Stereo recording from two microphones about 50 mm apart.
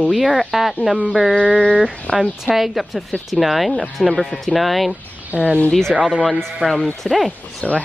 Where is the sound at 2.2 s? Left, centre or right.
Centre.